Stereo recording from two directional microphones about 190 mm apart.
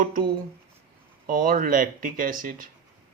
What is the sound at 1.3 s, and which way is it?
Speech, 50° right (ahead or behind).